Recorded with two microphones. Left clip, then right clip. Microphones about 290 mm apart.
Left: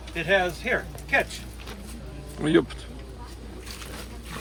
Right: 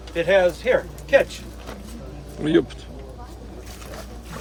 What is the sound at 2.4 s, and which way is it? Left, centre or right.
Speech, centre.